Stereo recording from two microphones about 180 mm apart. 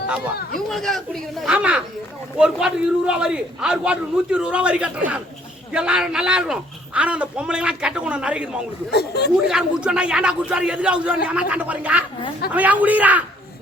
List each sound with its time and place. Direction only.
0.7 s a man's voice: centre (ahead or behind)
8.9 s speech: 65° left (ahead or behind)
9.5 s a man's voice: 5° right (ahead or behind)
11.3 s a sound: 5° right (ahead or behind)